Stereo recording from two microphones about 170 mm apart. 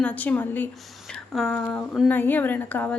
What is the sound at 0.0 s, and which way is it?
A woman's voice, 10° left (ahead or behind).